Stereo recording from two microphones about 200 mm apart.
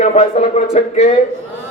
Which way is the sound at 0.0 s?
35° left (ahead or behind).